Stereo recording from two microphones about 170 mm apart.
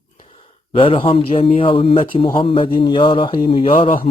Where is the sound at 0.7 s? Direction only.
30° left (ahead or behind).